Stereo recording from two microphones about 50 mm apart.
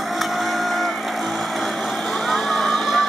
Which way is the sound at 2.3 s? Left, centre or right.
Centre.